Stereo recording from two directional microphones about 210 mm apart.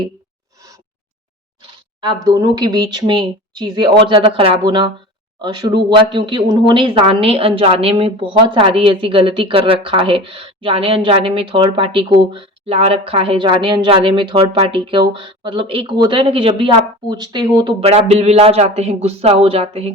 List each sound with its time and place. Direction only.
2.2 s speech: 20° right (ahead or behind)